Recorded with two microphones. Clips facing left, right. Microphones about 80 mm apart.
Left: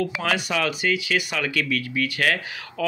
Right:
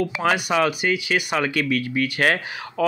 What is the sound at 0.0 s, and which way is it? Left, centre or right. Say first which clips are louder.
Speech: right 3 dB; right.